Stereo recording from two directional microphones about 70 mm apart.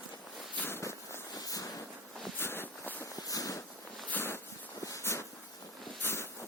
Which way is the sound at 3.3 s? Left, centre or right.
Left.